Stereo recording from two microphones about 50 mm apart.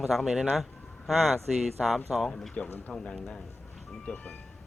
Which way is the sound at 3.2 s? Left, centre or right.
Centre.